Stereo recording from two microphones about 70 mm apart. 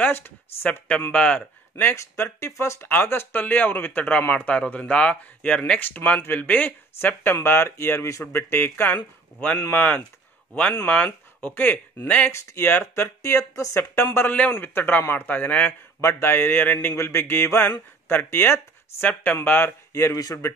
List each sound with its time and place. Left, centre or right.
0.0 s speech: left
1.1 s speech: centre
2.0 s speech: left; by 5.8 s centre
5.8 s speech: left
12.3 s speech: left
13.7 s speech: left
14.3 s speech: left
16.0 s speech: left
19.9 s speech: left